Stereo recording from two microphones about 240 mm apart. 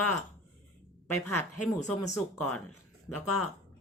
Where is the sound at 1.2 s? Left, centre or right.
Left.